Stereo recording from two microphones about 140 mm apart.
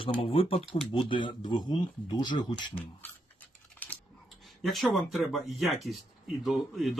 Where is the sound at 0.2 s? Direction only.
40° left (ahead or behind).